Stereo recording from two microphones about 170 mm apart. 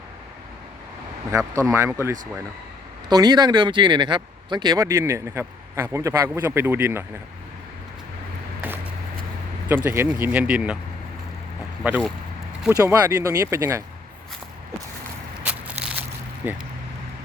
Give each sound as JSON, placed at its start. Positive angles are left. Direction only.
{"t": 1.3, "sound": "speech", "side_deg": -15}
{"t": 8.6, "sound": "a sound", "side_deg": -10}
{"t": 9.6, "sound": "speech", "side_deg": -10}
{"t": 11.8, "sound": "speech", "side_deg": -10}
{"t": 16.4, "sound": "speech", "side_deg": -10}